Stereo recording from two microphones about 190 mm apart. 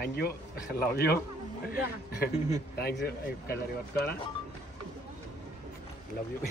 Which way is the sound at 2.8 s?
55° left (ahead or behind).